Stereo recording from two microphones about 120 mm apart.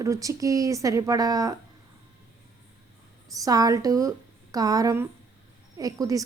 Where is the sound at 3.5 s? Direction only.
30° right (ahead or behind).